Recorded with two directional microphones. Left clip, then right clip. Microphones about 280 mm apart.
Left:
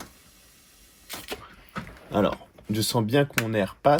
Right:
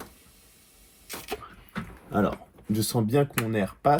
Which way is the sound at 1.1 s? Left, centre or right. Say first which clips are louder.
Even; centre.